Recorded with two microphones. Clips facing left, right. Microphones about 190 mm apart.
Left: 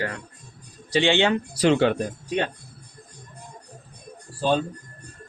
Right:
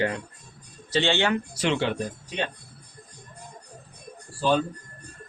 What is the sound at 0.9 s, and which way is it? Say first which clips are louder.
Speech: left 3 dB; 15° left (ahead or behind).